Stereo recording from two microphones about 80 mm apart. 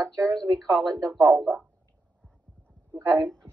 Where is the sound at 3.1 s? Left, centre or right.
Centre.